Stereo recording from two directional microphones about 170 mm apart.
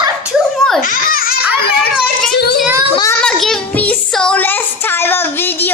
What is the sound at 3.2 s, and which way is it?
Child singing, 5° left (ahead or behind).